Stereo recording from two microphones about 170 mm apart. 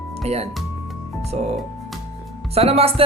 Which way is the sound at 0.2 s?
40° right (ahead or behind).